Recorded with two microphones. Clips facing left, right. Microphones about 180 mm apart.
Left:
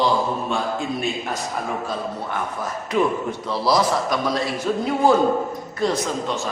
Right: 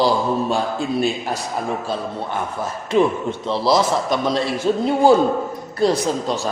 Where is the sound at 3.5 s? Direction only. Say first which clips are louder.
Right 2 dB; 25° right (ahead or behind).